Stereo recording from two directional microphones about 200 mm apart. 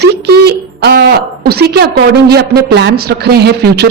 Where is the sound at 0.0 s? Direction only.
55° right (ahead or behind).